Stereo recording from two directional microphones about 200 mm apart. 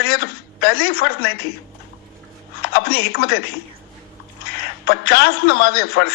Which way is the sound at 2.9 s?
55° left (ahead or behind).